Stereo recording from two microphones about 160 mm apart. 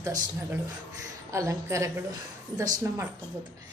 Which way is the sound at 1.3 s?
20° right (ahead or behind).